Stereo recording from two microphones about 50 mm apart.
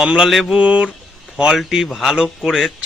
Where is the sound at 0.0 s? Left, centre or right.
Centre.